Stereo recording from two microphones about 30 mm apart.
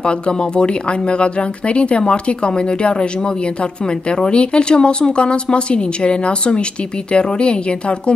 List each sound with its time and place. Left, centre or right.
1.2 s speech: left
4.2 s speech: left